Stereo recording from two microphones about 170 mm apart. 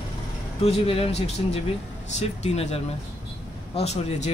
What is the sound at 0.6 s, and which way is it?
Speech, 35° left (ahead or behind).